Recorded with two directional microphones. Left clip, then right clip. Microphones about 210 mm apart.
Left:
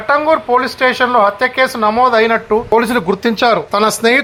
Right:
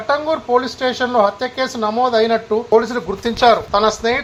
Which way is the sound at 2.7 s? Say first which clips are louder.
Left 1 dB; 40° left (ahead or behind).